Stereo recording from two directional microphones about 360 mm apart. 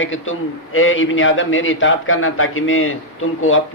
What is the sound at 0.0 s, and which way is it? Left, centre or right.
A man's voice, left.